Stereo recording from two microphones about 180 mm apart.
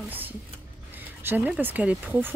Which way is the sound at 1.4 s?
10° right (ahead or behind).